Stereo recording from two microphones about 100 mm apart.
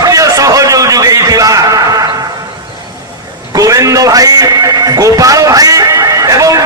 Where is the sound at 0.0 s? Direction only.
35° right (ahead or behind).